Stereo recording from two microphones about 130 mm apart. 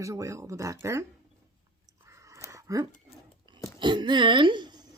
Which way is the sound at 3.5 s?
35° right (ahead or behind).